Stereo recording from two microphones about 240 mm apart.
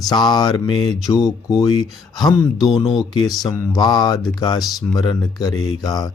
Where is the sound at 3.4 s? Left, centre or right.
Centre.